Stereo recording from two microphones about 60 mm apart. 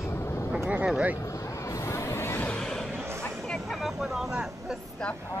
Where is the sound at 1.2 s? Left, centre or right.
Left.